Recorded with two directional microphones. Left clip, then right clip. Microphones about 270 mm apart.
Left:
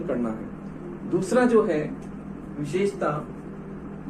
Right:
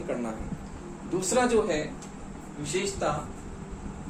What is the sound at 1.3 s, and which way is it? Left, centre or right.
Speech, centre.